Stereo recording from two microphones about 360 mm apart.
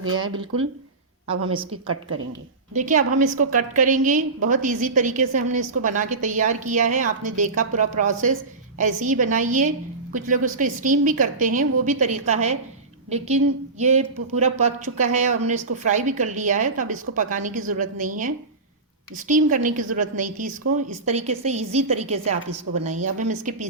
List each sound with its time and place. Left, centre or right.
0.0 s speech: right
1.7 s speech: right
2.7 s a woman's voice: right